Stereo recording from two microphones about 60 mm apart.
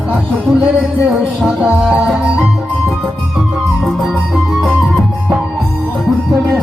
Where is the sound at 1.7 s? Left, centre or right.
Right.